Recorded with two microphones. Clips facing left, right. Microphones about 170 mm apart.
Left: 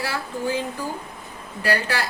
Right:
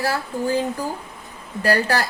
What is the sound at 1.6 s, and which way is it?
Speech, 40° right (ahead or behind).